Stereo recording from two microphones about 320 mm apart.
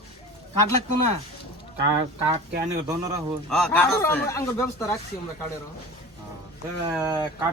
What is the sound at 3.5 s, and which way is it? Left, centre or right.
Speech, centre.